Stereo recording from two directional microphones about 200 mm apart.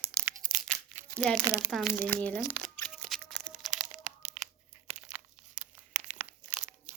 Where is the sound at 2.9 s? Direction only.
Centre (ahead or behind).